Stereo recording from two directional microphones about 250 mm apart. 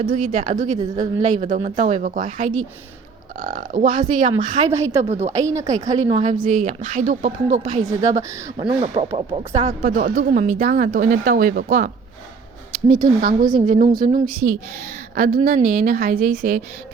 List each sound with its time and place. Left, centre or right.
0.0 s a woman's voice: right
0.8 s a woman's voice: centre
1.2 s a woman's voice: right
4.7 s a woman's voice: centre
5.0 s speech: right
12.9 s a woman's voice: right